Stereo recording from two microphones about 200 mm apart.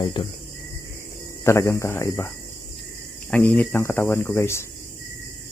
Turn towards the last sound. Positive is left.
turn(degrees=15)  # may be behind; listen again after turning